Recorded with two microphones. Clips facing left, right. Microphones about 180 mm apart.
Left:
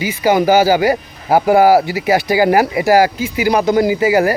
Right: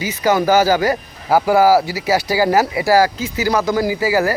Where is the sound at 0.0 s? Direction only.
10° left (ahead or behind).